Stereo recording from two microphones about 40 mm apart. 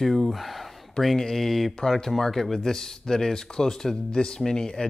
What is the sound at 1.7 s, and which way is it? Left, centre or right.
Speech, centre.